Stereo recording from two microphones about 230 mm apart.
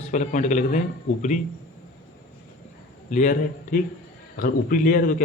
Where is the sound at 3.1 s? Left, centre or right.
Left.